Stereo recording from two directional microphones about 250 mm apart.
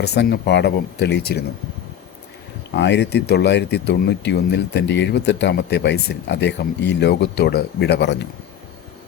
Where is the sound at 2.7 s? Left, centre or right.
Left.